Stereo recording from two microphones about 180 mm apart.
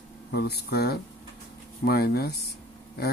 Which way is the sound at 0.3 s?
65° left (ahead or behind).